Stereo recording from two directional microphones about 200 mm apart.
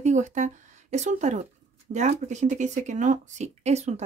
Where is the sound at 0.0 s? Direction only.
35° right (ahead or behind).